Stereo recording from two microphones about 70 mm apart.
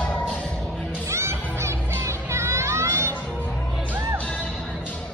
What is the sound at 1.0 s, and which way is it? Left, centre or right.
Music, right.